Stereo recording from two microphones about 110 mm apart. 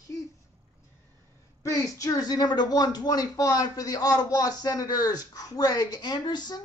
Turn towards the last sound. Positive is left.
turn(degrees=40)  # may be behind; listen again after turning